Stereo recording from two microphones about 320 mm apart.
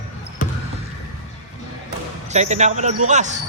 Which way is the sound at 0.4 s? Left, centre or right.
Left.